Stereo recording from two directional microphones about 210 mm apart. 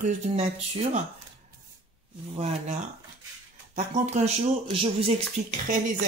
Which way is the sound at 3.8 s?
35° right (ahead or behind).